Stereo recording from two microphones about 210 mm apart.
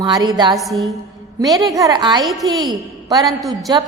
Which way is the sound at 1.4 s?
15° right (ahead or behind).